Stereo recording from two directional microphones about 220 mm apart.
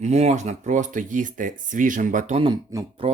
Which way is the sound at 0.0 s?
30° right (ahead or behind).